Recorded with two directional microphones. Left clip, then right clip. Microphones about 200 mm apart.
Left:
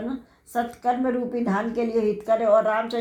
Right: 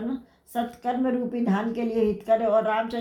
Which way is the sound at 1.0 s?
30° left (ahead or behind).